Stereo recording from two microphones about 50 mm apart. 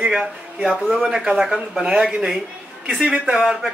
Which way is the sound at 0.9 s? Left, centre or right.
Centre.